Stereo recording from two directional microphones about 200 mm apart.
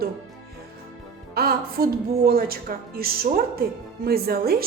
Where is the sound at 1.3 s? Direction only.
50° right (ahead or behind).